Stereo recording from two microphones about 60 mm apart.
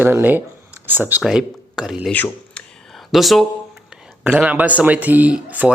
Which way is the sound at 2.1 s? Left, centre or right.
Left.